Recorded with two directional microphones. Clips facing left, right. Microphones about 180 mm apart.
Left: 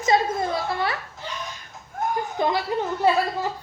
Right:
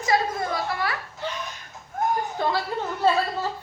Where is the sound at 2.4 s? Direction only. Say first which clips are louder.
Left 2 dB; 20° left (ahead or behind).